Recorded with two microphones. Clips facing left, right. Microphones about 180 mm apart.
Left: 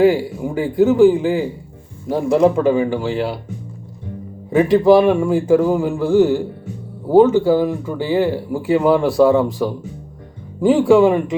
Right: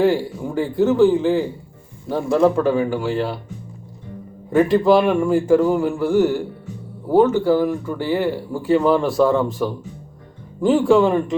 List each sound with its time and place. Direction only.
0.0 s speech: 10° left (ahead or behind)
4.5 s speech: 20° left (ahead or behind)
5.9 s a man's voice: 25° left (ahead or behind)
7.1 s speech: 10° left (ahead or behind)